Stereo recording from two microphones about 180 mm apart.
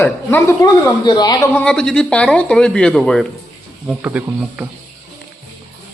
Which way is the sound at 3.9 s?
10° right (ahead or behind).